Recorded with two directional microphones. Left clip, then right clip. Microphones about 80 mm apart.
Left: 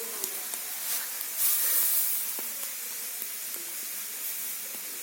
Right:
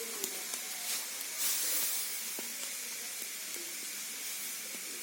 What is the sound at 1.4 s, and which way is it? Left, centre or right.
Steam, left.